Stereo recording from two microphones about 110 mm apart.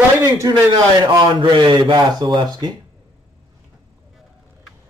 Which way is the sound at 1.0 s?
40° right (ahead or behind).